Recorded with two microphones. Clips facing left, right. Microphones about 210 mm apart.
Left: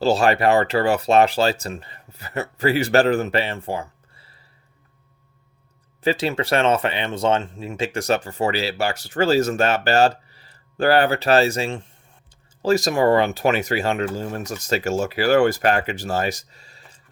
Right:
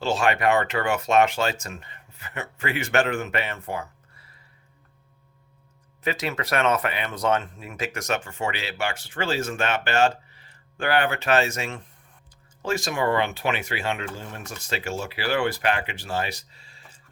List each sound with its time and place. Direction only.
0.0 s speech: 35° left (ahead or behind)
6.0 s speech: 30° left (ahead or behind)